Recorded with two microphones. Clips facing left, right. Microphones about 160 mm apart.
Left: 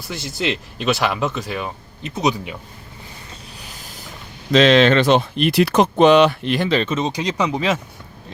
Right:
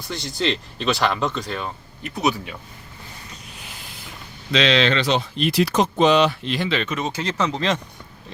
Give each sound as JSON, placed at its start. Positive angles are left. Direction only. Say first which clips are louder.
{"t": 0.1, "sound": "speech", "louder": "even", "side_deg": 5}
{"t": 2.0, "sound": "speech", "louder": "left 2 dB", "side_deg": 20}
{"t": 4.5, "sound": "speech", "louder": "left 6 dB", "side_deg": 50}
{"t": 6.8, "sound": "speech", "louder": "left 4 dB", "side_deg": 20}